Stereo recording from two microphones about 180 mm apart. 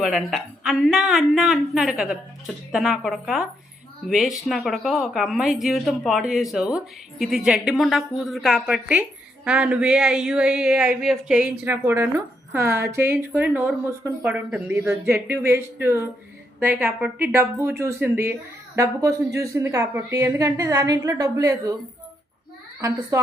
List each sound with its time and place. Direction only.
0.0 s a woman's voice: centre (ahead or behind); by 21.8 s 20° right (ahead or behind)
22.8 s speech: 15° right (ahead or behind)